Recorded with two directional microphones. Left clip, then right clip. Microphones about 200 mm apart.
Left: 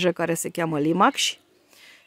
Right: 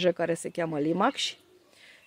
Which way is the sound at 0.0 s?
45° left (ahead or behind).